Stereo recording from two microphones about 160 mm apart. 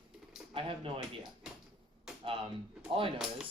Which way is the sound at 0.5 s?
35° right (ahead or behind).